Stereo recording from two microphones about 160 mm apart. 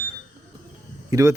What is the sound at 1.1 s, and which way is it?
Speech, 20° right (ahead or behind).